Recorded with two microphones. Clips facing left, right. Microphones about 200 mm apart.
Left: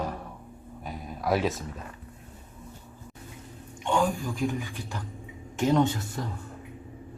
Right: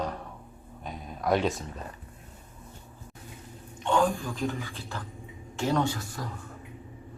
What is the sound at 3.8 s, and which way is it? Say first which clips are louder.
A woman's voice: right 1 dB; 10° left (ahead or behind).